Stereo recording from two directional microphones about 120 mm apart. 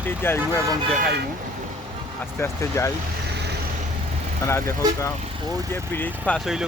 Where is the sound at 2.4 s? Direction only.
25° left (ahead or behind).